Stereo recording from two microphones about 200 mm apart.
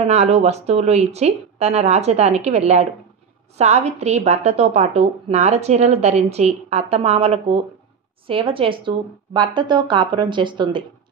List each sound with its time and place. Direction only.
0.0 s a woman's voice: 35° right (ahead or behind)